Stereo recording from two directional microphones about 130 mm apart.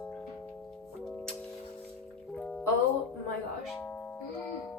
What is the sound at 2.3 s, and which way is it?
Music, 10° left (ahead or behind).